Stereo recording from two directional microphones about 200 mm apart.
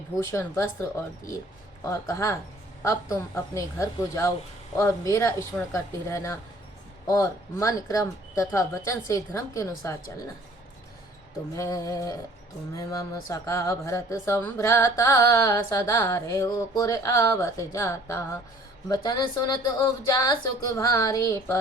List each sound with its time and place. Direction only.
0.2 s speech: 15° left (ahead or behind)
11.5 s speech: 15° left (ahead or behind)
20.7 s speech: 15° left (ahead or behind)